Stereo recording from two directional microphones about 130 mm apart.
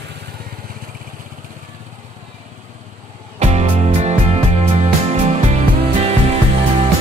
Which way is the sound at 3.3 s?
55° right (ahead or behind).